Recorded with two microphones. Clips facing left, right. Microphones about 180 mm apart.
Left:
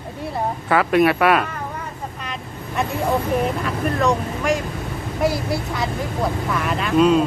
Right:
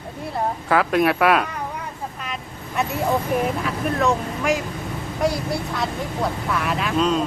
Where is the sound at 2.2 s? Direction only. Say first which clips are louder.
Left 1 dB; centre (ahead or behind).